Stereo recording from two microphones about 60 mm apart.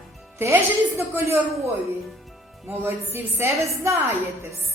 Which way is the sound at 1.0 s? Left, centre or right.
Right.